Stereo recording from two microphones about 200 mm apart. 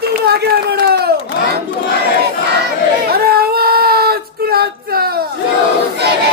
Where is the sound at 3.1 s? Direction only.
50° right (ahead or behind).